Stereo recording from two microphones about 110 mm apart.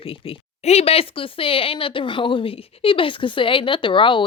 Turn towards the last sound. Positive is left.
turn(degrees=50)  # may be behind; listen again after turning